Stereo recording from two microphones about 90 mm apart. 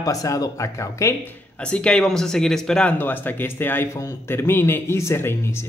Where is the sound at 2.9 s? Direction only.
20° left (ahead or behind).